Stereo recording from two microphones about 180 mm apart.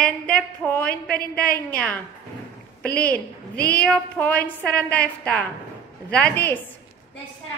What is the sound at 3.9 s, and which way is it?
A woman's voice, 10° left (ahead or behind).